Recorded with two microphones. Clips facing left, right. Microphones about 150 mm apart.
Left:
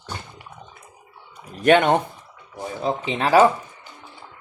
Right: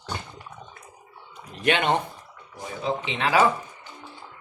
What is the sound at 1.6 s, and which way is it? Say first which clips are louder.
Speech: left 7 dB; 45° left (ahead or behind).